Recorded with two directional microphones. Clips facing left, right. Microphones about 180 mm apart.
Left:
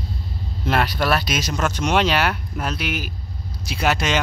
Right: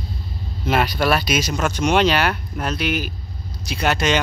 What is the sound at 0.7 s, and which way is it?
Speech, centre (ahead or behind).